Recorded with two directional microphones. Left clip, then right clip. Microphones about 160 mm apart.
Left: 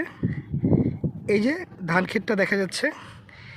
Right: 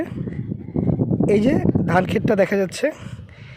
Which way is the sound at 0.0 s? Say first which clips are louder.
Right 2 dB; 10° right (ahead or behind).